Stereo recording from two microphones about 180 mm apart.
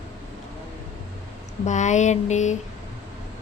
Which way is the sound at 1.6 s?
40° left (ahead or behind).